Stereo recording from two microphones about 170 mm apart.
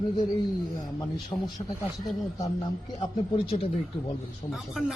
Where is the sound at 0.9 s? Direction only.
20° left (ahead or behind).